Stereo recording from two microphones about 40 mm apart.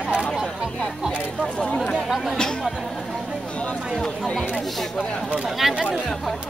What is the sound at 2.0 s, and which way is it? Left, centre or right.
Speech, centre.